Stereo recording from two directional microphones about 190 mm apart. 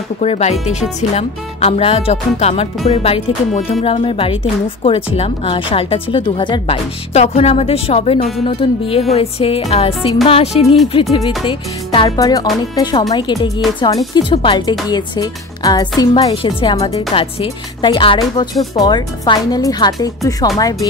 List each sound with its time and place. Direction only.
0.2 s a woman's voice: 35° left (ahead or behind); by 20.9 s 20° left (ahead or behind)